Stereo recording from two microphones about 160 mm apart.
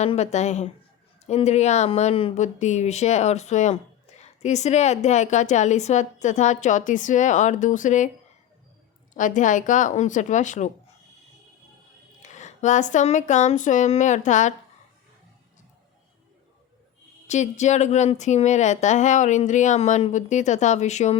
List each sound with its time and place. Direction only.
0.0 s speech: 45° left (ahead or behind)
9.1 s speech: 55° left (ahead or behind)
12.2 s speech: 50° left (ahead or behind)
17.2 s speech: 45° left (ahead or behind)